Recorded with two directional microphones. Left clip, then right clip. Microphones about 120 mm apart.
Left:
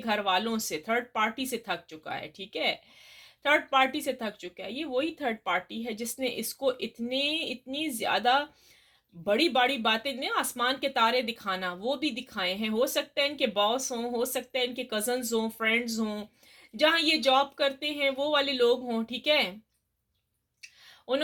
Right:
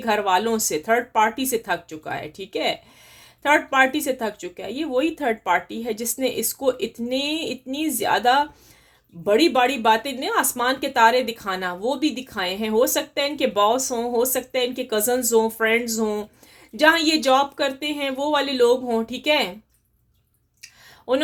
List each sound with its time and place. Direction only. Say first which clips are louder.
0.0 s speech: right 8 dB; 30° right (ahead or behind)
21.1 s speech: right 8 dB; 30° right (ahead or behind)